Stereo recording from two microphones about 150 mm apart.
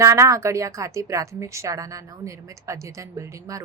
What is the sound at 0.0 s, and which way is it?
A woman's voice, 20° right (ahead or behind).